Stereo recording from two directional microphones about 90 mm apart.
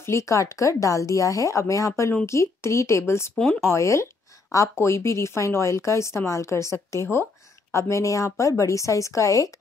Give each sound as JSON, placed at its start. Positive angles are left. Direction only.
{"t": 0.0, "sound": "speech", "side_deg": 35}